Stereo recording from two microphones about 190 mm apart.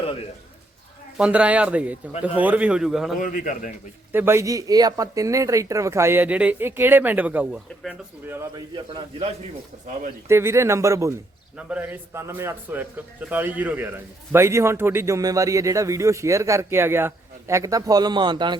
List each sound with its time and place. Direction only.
1.2 s a man's voice: 5° right (ahead or behind)
3.2 s a man's voice: 45° left (ahead or behind)
4.1 s a man's voice: 10° right (ahead or behind)
8.4 s a man's voice: 20° right (ahead or behind)
10.2 s a man's voice: 15° right (ahead or behind)